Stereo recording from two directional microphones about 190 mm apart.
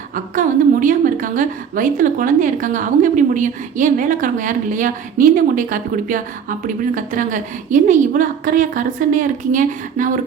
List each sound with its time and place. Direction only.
0.1 s a woman's voice: 45° right (ahead or behind)